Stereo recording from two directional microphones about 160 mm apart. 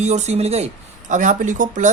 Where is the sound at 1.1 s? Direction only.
50° right (ahead or behind).